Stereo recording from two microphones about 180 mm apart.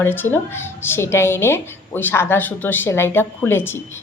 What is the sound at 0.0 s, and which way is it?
A woman's voice, 10° left (ahead or behind).